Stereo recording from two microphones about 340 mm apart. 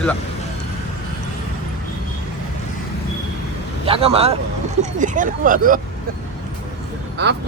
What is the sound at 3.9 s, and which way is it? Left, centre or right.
Speech, centre.